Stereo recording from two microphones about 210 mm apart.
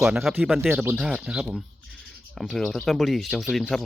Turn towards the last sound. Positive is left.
turn(degrees=0)  # may be behind; listen again after turning